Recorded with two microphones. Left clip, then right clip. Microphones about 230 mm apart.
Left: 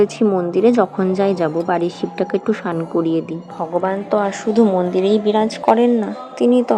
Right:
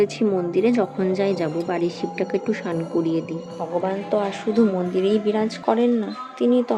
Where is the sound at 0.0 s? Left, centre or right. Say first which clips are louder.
Left 5 dB; centre.